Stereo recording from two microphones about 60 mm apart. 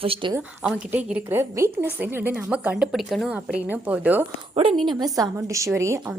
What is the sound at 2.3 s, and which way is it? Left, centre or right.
Speech, right.